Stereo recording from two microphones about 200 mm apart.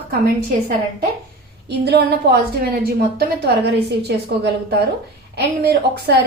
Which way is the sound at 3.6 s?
55° right (ahead or behind).